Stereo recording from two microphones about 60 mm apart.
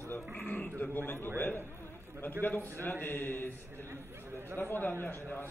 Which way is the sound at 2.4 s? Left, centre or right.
Left.